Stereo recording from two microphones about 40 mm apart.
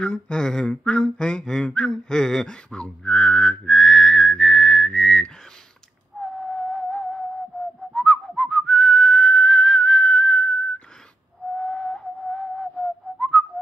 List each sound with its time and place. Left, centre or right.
0.0 s a sound: left
0.7 s speech: left
1.1 s a sound: left
2.4 s whistling: centre
6.2 s whistle: centre
7.9 s whistling: centre
11.5 s whistle: centre
12.8 s whistling: centre